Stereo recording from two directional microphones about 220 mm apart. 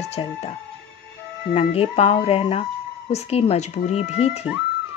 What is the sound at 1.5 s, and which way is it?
Speech, 25° left (ahead or behind).